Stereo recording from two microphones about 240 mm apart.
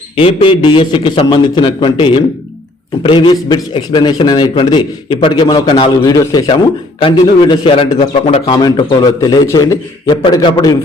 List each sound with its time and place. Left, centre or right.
0.2 s a man's voice: left